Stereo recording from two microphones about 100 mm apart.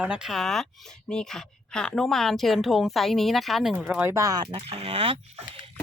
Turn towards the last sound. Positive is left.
turn(degrees=-70)  # may be behind; listen again after turning